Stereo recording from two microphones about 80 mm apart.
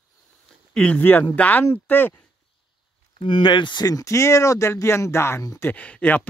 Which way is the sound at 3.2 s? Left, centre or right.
Left.